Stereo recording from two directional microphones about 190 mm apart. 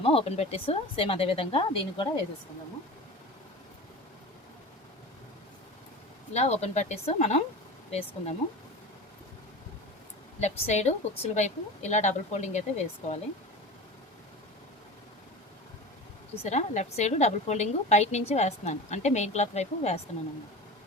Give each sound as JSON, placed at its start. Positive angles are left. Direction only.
{"t": 0.0, "sound": "speech", "side_deg": 30}
{"t": 6.3, "sound": "a woman's voice", "side_deg": 35}
{"t": 10.4, "sound": "a woman's voice", "side_deg": 35}
{"t": 16.4, "sound": "a woman's voice", "side_deg": 35}